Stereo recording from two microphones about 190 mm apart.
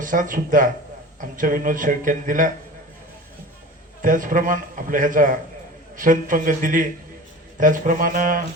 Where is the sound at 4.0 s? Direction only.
45° right (ahead or behind).